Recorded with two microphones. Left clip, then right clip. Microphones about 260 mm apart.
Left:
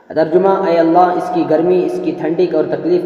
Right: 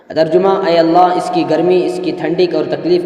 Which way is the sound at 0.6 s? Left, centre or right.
Centre.